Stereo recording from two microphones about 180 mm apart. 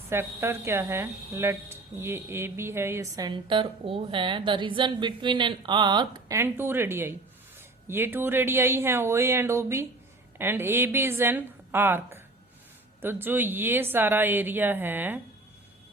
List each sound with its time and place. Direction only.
0.1 s speech: 15° right (ahead or behind)